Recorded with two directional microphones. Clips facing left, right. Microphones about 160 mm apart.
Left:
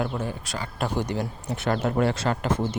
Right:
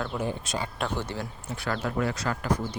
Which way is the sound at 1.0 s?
15° left (ahead or behind).